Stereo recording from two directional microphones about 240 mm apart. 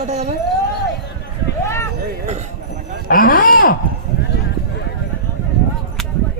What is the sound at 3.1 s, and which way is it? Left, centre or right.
Speech, left.